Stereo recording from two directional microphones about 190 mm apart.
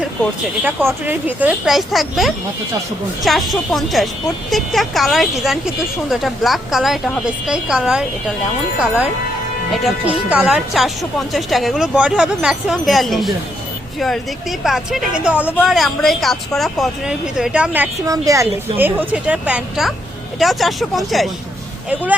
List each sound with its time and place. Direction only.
0.6 s speech: 10° right (ahead or behind)
9.7 s speech: 5° right (ahead or behind)
14.6 s speech: centre (ahead or behind)
18.0 s speech: 15° right (ahead or behind); by 21.2 s centre (ahead or behind)